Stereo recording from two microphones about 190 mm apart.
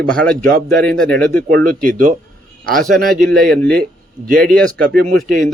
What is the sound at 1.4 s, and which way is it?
Speech, 45° right (ahead or behind).